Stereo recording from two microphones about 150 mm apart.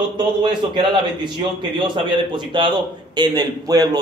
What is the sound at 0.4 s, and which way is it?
A man's voice, 30° right (ahead or behind).